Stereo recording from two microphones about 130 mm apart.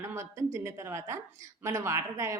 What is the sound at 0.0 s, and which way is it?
A woman's voice, 20° right (ahead or behind).